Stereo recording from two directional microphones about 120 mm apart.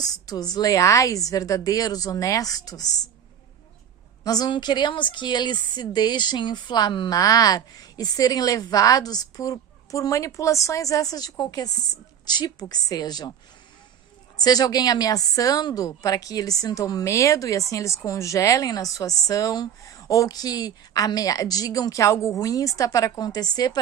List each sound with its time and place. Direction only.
0.0 s speech: 35° left (ahead or behind)
4.2 s speech: 30° left (ahead or behind)
14.3 s a woman's voice: 35° left (ahead or behind)